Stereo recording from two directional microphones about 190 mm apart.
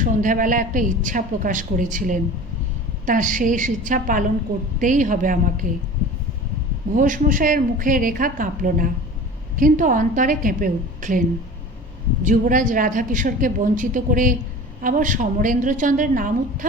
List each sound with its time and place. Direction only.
0.0 s a woman's voice: 45° right (ahead or behind)
6.9 s a woman's voice: 45° right (ahead or behind)
12.2 s a woman's voice: 45° right (ahead or behind)